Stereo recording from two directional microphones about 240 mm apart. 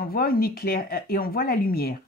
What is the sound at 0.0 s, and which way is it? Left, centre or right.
Speech, left.